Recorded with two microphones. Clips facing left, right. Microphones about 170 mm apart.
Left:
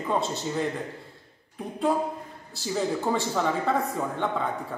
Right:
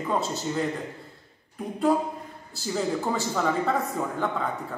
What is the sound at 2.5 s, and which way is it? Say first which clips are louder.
Speech: even; centre (ahead or behind).